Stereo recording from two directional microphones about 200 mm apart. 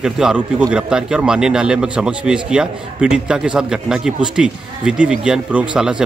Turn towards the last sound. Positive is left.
turn(degrees=-5)  # may be behind; listen again after turning